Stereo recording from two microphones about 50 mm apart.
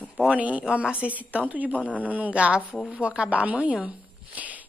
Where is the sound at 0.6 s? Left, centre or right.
Centre.